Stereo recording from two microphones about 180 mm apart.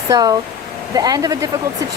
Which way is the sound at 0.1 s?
20° right (ahead or behind).